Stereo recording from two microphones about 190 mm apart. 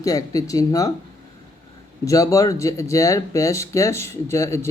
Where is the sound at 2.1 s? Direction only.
15° left (ahead or behind).